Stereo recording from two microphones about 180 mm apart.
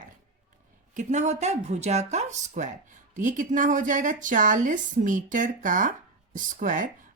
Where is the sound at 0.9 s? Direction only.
40° right (ahead or behind).